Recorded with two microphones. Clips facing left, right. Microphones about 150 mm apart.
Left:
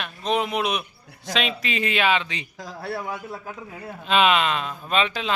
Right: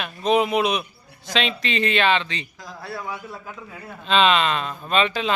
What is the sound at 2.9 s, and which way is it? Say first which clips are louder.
Speech: right 1 dB; 25° left (ahead or behind).